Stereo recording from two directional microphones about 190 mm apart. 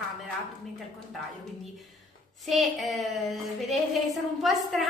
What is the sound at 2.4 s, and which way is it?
A woman's voice, centre (ahead or behind).